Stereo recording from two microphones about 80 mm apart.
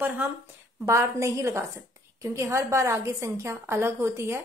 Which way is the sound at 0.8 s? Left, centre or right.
Right.